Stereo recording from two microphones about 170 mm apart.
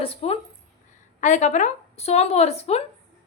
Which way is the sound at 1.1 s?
45° left (ahead or behind).